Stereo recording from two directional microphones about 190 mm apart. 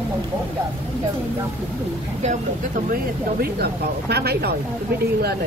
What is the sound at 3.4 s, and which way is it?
Speech, 55° right (ahead or behind).